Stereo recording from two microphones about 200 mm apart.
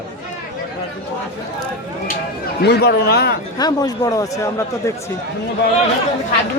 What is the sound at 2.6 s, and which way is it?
Speech, 55° left (ahead or behind).